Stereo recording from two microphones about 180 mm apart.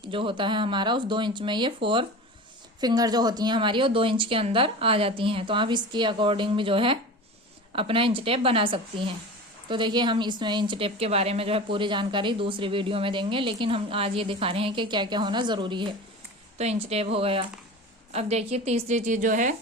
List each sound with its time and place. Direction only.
0.1 s a woman's voice: 30° right (ahead or behind); by 19.5 s 45° right (ahead or behind)